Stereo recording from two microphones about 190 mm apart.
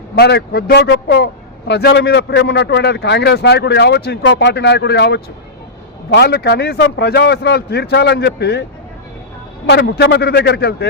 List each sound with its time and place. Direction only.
0.2 s a man's voice: 60° left (ahead or behind)
9.6 s a man's voice: 60° left (ahead or behind)